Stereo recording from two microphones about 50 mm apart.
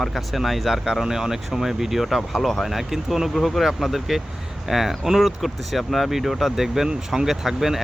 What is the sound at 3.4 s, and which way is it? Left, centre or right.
Speech, centre.